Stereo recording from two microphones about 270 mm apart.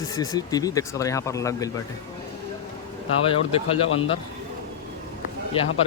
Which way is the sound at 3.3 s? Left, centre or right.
Centre.